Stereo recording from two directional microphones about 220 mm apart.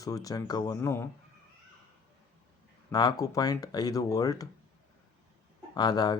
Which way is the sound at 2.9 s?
20° left (ahead or behind).